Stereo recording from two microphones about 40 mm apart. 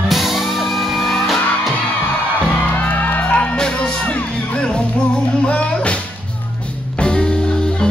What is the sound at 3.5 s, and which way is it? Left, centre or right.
Music, left.